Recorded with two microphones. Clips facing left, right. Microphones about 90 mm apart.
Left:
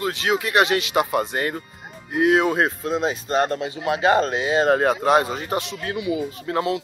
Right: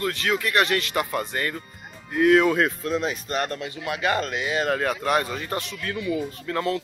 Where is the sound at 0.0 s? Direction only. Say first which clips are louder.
Left 2 dB; 20° left (ahead or behind).